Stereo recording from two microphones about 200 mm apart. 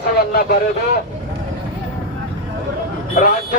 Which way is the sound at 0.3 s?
50° left (ahead or behind).